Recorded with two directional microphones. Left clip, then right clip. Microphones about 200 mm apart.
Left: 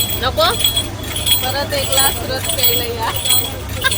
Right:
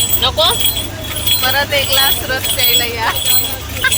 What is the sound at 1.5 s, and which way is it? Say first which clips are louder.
Speech: right 4 dB; 5° right (ahead or behind).